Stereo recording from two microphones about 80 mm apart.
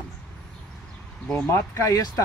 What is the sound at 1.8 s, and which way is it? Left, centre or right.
Speech, left.